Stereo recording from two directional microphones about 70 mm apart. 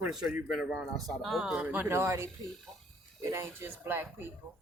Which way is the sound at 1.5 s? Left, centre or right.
Right.